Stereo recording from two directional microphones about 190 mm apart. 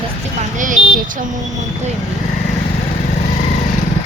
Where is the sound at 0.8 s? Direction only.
65° left (ahead or behind).